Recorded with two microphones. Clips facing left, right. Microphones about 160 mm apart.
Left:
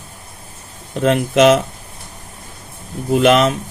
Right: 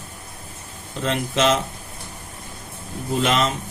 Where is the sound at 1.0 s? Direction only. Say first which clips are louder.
Left 9 dB; 55° left (ahead or behind).